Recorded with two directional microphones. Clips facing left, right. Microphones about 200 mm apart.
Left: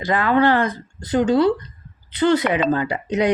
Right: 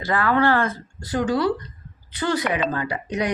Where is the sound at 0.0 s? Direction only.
20° left (ahead or behind).